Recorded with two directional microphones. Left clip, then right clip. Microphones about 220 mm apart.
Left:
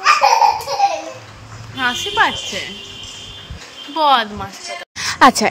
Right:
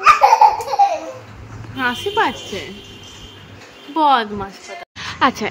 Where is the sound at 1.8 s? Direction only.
5° right (ahead or behind).